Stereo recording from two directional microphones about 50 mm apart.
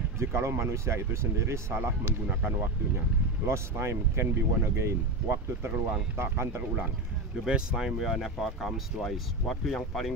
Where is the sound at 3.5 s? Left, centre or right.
Right.